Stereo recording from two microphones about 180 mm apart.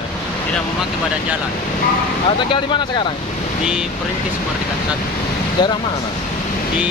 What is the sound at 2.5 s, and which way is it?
Speech, 25° left (ahead or behind).